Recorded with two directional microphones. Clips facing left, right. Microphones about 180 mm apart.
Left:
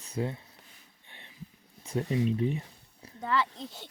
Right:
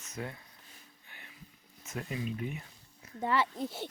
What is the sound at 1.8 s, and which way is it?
Speech, 30° left (ahead or behind).